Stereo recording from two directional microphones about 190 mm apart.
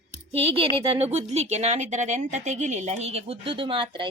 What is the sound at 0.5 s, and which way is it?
Speech, 30° right (ahead or behind).